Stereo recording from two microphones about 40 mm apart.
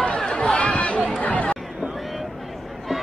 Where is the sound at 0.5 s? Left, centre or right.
Left.